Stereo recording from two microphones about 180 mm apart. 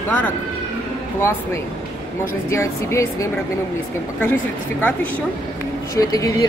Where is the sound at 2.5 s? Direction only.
15° left (ahead or behind).